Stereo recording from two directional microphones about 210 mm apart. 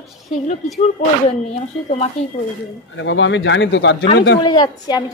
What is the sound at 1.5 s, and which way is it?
Speech, 35° left (ahead or behind).